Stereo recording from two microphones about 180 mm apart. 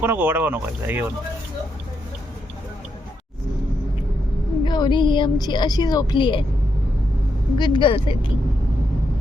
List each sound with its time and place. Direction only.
0.0 s speech: 10° right (ahead or behind)
4.6 s speech: 25° left (ahead or behind)
7.6 s speech: 25° left (ahead or behind)